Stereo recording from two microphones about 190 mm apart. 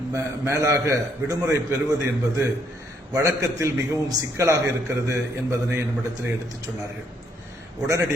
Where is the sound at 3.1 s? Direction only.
15° right (ahead or behind).